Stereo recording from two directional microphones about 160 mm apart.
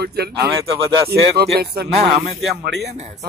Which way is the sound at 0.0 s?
85° right.